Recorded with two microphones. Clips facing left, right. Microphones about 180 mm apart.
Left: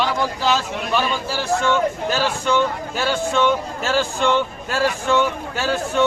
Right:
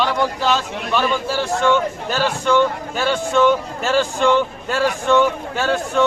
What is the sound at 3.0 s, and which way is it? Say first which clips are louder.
A man's voice: right 3 dB; centre (ahead or behind).